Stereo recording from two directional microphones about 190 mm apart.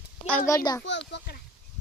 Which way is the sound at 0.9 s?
65° left (ahead or behind).